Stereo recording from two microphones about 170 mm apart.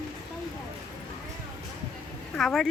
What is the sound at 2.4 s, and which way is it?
Speech, centre (ahead or behind).